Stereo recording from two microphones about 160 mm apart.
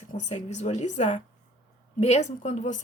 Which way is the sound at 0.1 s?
50° left (ahead or behind).